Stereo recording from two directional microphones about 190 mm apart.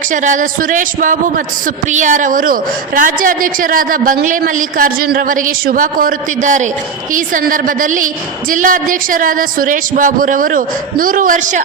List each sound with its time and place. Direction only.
0.1 s a woman's voice: 40° right (ahead or behind)